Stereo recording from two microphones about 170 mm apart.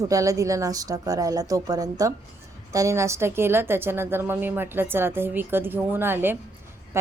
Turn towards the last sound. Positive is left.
turn(degrees=-15)  # may be behind; listen again after turning